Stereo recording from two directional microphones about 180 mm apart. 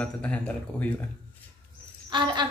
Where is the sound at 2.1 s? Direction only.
25° right (ahead or behind).